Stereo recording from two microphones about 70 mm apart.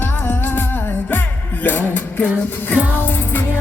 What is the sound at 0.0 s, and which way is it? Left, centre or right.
Music, left.